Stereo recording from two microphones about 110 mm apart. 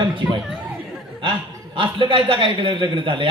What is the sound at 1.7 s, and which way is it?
A man's voice, 50° right (ahead or behind).